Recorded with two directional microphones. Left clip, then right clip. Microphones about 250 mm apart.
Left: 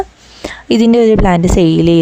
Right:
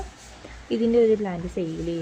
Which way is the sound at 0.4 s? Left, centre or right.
Left.